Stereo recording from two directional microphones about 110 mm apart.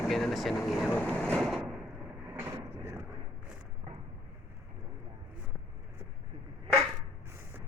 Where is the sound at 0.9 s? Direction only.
15° left (ahead or behind).